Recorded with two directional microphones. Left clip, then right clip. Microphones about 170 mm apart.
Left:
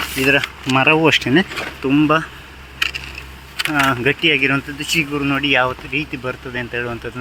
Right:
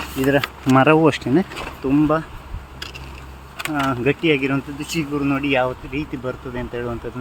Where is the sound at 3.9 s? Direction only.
Centre (ahead or behind).